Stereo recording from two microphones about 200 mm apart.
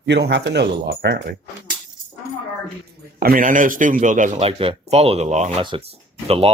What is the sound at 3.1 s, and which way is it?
A man's voice, 45° right (ahead or behind).